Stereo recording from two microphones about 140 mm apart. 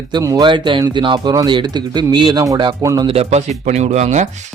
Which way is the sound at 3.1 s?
45° right (ahead or behind).